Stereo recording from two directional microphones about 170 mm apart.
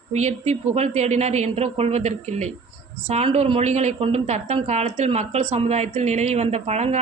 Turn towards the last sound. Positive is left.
turn(degrees=-40)  # may be behind; listen again after turning